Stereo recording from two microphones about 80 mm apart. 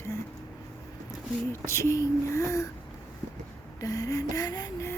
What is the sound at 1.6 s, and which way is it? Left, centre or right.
Speech, left.